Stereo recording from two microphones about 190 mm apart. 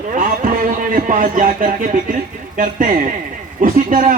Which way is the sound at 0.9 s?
45° right (ahead or behind).